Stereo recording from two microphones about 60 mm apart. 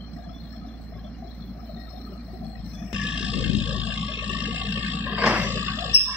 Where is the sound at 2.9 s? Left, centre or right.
Centre; by 6.1 s right.